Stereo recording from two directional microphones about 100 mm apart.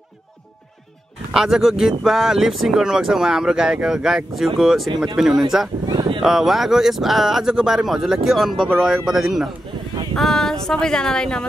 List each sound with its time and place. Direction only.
1.3 s speech: 5° right (ahead or behind)
5.9 s speech: 50° right (ahead or behind)
6.2 s speech: 5° right (ahead or behind)